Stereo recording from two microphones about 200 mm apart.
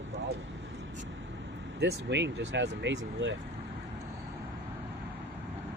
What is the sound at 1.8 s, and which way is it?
Speech, 60° right (ahead or behind).